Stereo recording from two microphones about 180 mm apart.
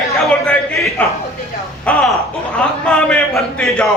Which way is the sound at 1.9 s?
5° left (ahead or behind).